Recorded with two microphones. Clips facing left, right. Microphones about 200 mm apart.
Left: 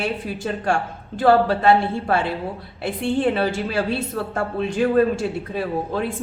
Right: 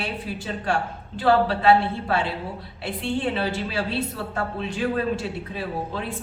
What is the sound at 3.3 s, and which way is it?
A woman's voice, 45° left (ahead or behind).